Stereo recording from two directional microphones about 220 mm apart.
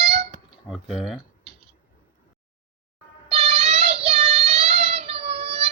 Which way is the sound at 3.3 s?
25° right (ahead or behind).